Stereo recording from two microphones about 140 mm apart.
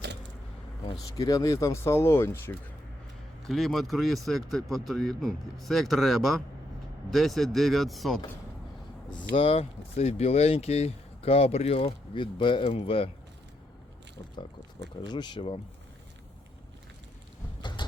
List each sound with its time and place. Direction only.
1.0 s speech: 25° left (ahead or behind)
3.4 s speech: centre (ahead or behind)
9.0 s speech: 35° left (ahead or behind)
15.0 s speech: 30° left (ahead or behind)
17.6 s vehicle: 35° left (ahead or behind)